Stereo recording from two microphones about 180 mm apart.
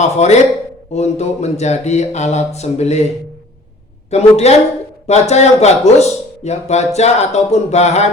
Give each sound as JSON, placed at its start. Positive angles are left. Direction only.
{"t": 0.0, "sound": "speech", "side_deg": 40}
{"t": 4.1, "sound": "speech", "side_deg": 35}